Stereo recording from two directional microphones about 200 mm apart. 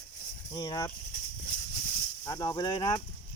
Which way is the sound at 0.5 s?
20° left (ahead or behind).